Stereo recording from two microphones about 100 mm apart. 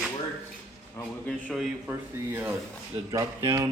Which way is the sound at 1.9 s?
20° right (ahead or behind).